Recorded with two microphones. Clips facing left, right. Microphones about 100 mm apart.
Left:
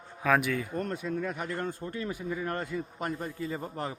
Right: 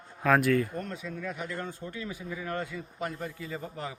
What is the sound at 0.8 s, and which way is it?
A man's voice, 45° left (ahead or behind).